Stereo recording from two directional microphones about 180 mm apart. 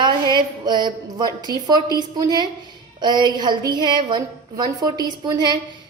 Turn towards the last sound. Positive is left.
turn(degrees=-25)  # may be behind; listen again after turning